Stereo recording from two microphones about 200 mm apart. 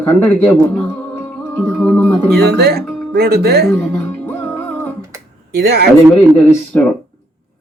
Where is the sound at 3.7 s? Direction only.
10° left (ahead or behind).